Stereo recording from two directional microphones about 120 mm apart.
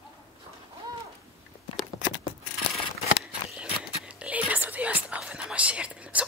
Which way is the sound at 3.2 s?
10° right (ahead or behind).